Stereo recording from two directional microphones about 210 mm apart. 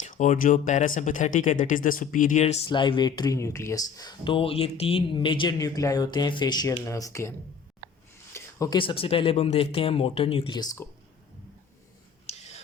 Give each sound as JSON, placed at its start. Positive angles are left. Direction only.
{"t": 0.0, "sound": "speech", "side_deg": 35}
{"t": 2.6, "sound": "speech", "side_deg": 20}
{"t": 12.2, "sound": "a sound", "side_deg": 30}